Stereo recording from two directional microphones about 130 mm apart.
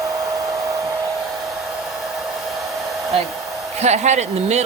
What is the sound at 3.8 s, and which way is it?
Speech, 60° right (ahead or behind).